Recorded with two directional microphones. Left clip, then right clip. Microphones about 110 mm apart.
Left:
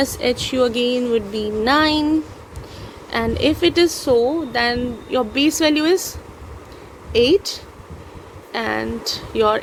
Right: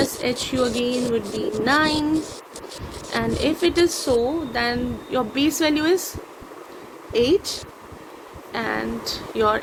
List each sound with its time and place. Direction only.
0.0 s a woman's voice: 75° left (ahead or behind)
8.5 s speech: 75° left (ahead or behind)